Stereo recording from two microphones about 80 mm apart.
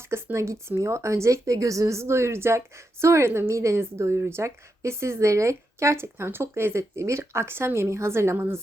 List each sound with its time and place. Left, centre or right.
0.1 s speech: right